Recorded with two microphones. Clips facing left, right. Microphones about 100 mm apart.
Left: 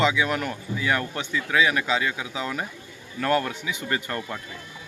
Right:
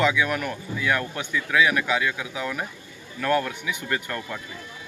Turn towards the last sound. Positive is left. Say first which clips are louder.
# left 1 dB
turn(degrees=30)  # may be behind; listen again after turning